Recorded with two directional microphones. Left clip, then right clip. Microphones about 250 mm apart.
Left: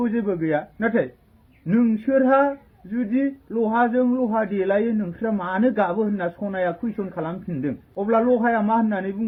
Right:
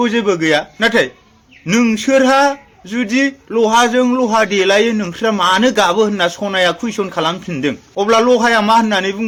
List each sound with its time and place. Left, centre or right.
0.0 s a man's voice: centre